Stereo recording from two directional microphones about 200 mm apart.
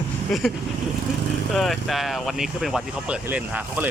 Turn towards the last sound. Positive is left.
turn(degrees=-10)  # may be behind; listen again after turning